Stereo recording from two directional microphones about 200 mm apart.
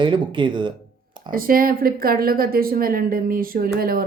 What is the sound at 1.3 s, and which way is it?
A woman's voice, 45° right (ahead or behind).